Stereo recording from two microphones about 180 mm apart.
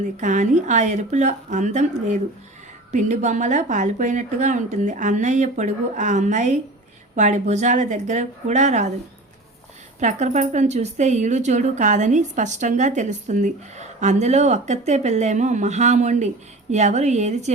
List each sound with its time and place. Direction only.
0.0 s speech: 45° right (ahead or behind)
2.9 s speech: 40° right (ahead or behind)
10.0 s speech: 40° right (ahead or behind)